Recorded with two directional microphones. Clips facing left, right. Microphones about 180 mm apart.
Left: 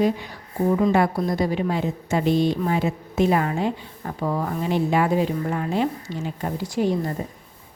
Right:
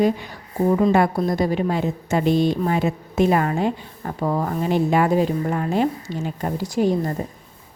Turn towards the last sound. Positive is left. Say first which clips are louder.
# right 2 dB
turn(degrees=-40)  # may be behind; listen again after turning